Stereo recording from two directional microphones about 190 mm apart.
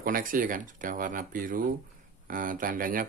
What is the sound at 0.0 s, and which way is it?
Speech, 45° right (ahead or behind).